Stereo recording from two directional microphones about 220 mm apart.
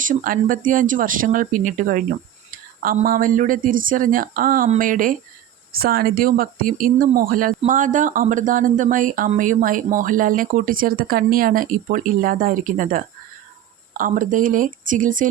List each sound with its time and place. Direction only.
0.0 s speech: 40° right (ahead or behind)